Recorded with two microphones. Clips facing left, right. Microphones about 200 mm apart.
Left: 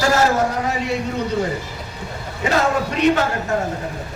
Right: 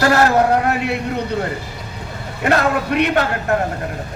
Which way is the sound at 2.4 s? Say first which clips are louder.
Right 2 dB; 60° right (ahead or behind).